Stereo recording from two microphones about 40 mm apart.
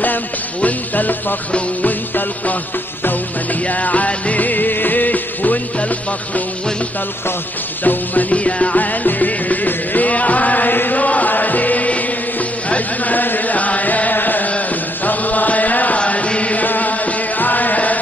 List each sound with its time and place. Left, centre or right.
0.6 s music: left
3.6 s music: left
7.8 s music: left
8.3 s music: left
8.7 s music: left
11.0 s music: left
15.0 s chant: left
16.0 s chant: left
16.6 s music: left